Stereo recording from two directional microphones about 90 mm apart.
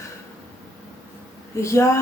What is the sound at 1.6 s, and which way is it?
Speech, 35° left (ahead or behind).